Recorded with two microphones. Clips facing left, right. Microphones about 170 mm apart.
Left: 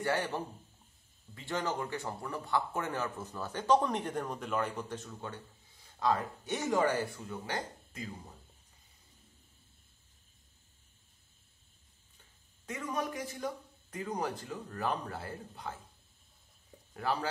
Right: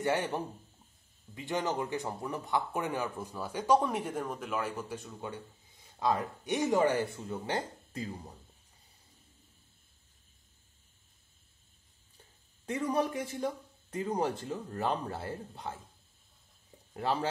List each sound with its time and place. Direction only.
0.0 s a man's voice: 20° right (ahead or behind)
12.6 s a man's voice: 30° right (ahead or behind)
16.9 s a man's voice: 25° right (ahead or behind)